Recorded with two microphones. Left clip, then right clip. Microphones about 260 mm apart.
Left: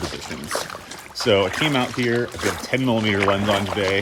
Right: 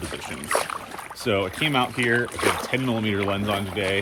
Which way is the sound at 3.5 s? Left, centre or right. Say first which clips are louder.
Left 6 dB; left.